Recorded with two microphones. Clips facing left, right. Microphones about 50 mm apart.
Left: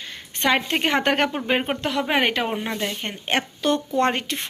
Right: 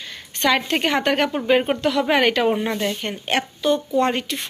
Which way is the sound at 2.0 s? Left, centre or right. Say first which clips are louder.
Right 4 dB; centre.